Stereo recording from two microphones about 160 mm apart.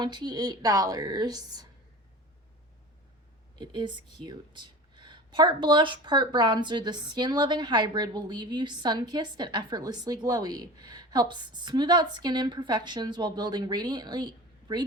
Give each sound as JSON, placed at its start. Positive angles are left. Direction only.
{"t": 0.0, "sound": "speech", "side_deg": -25}
{"t": 3.6, "sound": "speech", "side_deg": -30}